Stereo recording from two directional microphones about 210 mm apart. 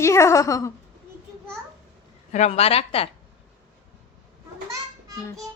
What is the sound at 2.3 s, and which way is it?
Speech, 30° left (ahead or behind).